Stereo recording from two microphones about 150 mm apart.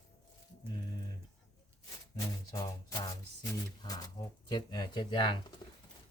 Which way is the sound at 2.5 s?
25° left (ahead or behind).